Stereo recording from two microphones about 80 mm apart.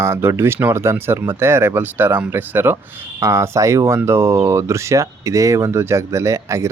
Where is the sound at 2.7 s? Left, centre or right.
Right.